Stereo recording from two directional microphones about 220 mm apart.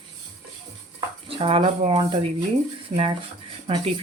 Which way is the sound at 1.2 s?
25° right (ahead or behind).